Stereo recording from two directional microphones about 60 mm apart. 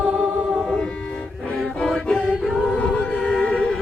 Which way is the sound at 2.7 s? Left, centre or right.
Centre.